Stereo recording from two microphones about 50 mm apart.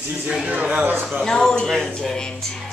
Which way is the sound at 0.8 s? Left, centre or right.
Right.